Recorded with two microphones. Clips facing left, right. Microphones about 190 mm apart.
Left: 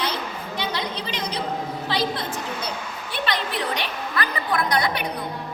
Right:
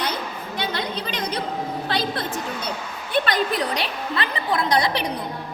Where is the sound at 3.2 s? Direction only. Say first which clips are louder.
Right 4 dB; 45° right (ahead or behind).